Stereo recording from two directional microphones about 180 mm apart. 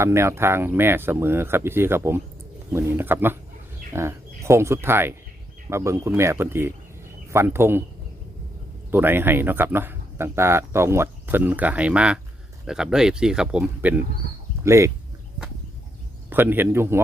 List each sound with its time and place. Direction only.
0.0 s speech: 15° right (ahead or behind)
8.9 s speech: 10° right (ahead or behind)
16.3 s speech: 10° right (ahead or behind)